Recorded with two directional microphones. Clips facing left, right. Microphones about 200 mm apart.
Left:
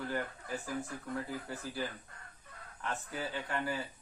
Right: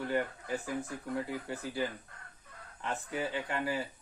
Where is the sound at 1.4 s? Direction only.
20° right (ahead or behind).